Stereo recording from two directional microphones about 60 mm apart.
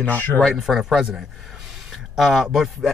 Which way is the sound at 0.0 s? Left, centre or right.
Left.